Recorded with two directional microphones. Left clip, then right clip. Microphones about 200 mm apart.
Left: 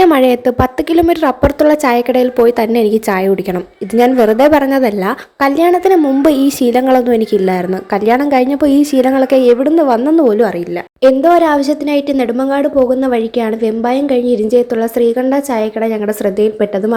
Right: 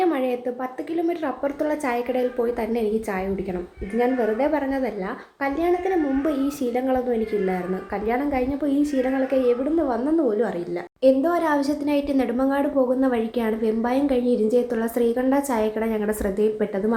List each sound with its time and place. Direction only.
0.0 s a woman's voice: 50° left (ahead or behind); by 16.6 s 35° left (ahead or behind)